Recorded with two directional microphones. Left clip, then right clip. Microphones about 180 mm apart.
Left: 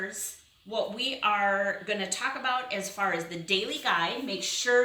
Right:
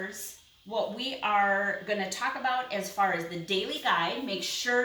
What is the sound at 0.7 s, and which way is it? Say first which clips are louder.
Speech: left 1 dB; 10° right (ahead or behind).